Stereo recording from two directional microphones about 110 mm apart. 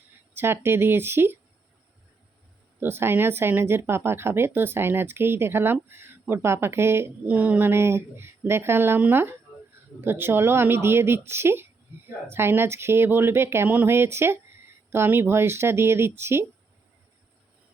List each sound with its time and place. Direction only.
0.3 s speech: 20° right (ahead or behind)
2.8 s speech: 20° right (ahead or behind)
7.3 s speech: 10° right (ahead or behind)